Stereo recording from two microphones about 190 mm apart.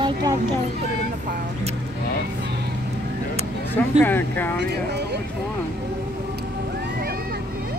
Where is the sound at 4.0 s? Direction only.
10° left (ahead or behind).